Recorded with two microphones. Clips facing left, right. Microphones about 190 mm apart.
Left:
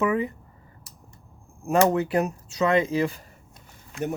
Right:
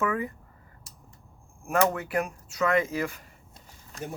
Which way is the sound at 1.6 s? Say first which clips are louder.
Left 5 dB; 20° left (ahead or behind).